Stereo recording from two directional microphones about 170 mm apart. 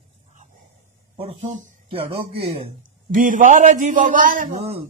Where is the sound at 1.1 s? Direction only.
35° right (ahead or behind).